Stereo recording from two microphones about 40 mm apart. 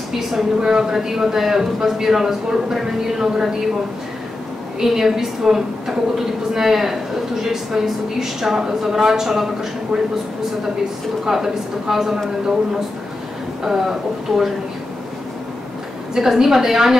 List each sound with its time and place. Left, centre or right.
0.3 s a woman's voice: centre
4.7 s a woman's voice: centre
11.2 s a woman's voice: centre
13.7 s a woman's voice: centre
16.2 s a woman's voice: centre